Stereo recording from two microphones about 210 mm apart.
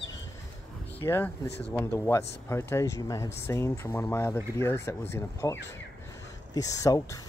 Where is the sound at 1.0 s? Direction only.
10° left (ahead or behind).